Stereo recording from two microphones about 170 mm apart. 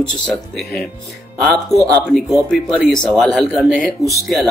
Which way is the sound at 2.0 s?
5° left (ahead or behind).